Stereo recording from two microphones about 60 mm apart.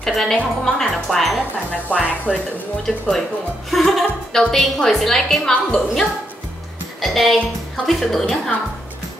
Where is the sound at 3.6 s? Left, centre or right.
Centre.